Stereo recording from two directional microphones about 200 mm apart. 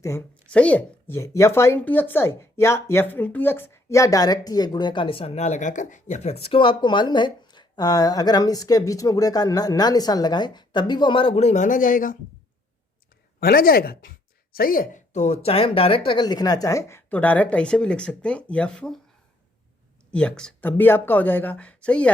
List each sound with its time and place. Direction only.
0.0 s speech: 10° left (ahead or behind); by 12.1 s 45° left (ahead or behind)
13.4 s speech: 50° left (ahead or behind); by 18.9 s 5° left (ahead or behind)
20.1 s speech: 5° left (ahead or behind)